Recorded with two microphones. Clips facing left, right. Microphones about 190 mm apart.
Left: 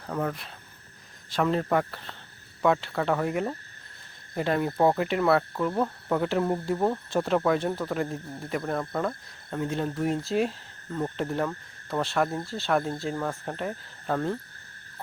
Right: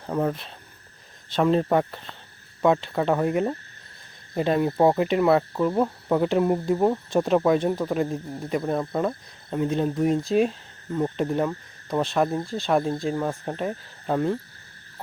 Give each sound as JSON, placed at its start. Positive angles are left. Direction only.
{"t": 0.1, "sound": "speech", "side_deg": -25}